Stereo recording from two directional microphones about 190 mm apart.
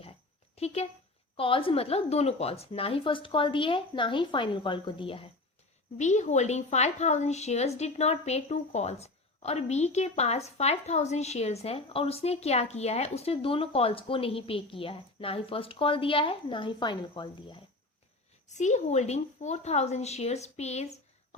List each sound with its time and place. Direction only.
0.0 s a sound: 30° left (ahead or behind)
1.4 s a woman's voice: 30° left (ahead or behind)
6.0 s speech: 40° left (ahead or behind)
18.4 s speech: 40° left (ahead or behind)